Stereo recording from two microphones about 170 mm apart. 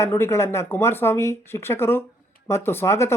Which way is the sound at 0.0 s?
15° left (ahead or behind).